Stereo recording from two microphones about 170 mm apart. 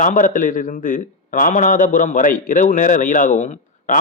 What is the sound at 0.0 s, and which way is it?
A man's voice, 50° left (ahead or behind).